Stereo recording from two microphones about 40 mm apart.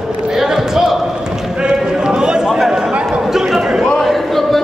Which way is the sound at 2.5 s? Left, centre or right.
Centre.